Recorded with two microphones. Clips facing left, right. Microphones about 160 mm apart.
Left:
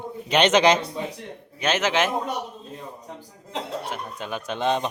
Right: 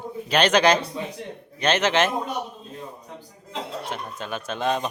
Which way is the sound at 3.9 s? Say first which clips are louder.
Even; 15° left (ahead or behind).